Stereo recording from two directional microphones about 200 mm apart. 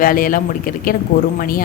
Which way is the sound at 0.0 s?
45° left (ahead or behind).